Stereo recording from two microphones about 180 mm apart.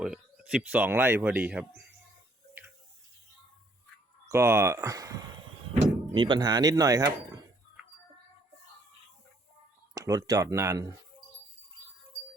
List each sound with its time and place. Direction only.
0.0 s speech: 5° right (ahead or behind)
4.3 s speech: 15° right (ahead or behind)
9.9 s speech: 20° right (ahead or behind)